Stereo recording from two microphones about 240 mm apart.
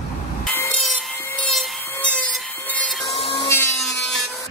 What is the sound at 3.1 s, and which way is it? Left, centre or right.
Wood, left.